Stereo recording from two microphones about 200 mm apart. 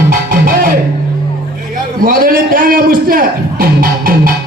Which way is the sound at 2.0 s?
45° right (ahead or behind).